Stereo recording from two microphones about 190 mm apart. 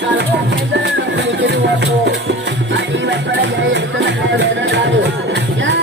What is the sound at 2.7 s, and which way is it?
Music, 70° right (ahead or behind).